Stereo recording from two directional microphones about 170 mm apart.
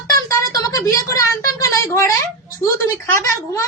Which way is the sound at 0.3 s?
20° left (ahead or behind).